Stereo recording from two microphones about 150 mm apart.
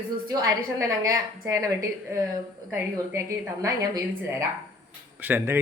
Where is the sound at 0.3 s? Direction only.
25° right (ahead or behind).